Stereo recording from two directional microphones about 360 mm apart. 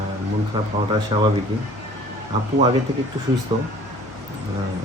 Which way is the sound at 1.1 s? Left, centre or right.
Centre.